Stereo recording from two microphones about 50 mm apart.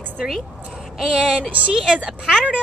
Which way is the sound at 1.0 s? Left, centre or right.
Centre.